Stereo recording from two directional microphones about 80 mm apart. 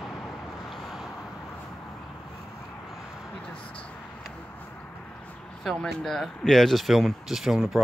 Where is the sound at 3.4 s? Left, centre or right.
Centre.